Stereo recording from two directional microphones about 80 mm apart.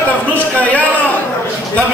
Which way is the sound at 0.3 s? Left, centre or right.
Centre.